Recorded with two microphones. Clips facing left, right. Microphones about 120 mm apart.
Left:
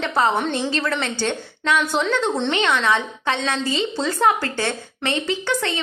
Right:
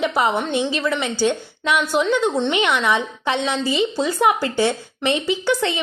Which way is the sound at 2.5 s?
15° right (ahead or behind).